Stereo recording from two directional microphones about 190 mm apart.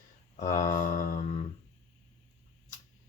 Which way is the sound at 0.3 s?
45° left (ahead or behind).